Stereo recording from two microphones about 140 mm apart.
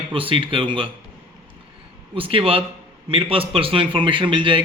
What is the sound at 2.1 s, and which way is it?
A man's voice, 40° right (ahead or behind).